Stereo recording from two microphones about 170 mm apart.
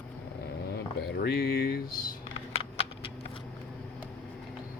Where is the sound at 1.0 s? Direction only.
70° left (ahead or behind).